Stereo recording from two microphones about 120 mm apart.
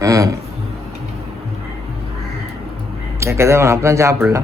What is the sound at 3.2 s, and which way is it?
Speech, 25° right (ahead or behind).